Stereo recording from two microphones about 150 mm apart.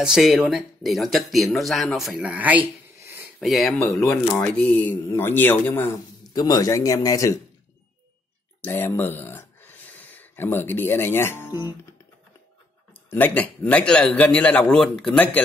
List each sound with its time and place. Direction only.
0.0 s speech: 5° right (ahead or behind)
3.3 s a man's voice: centre (ahead or behind)
6.3 s speech: 25° left (ahead or behind)
8.5 s speech: 10° left (ahead or behind)
13.1 s a man's voice: 10° left (ahead or behind)